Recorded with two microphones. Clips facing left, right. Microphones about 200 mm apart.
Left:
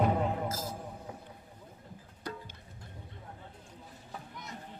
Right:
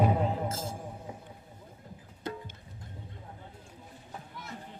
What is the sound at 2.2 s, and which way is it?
Music, 25° right (ahead or behind).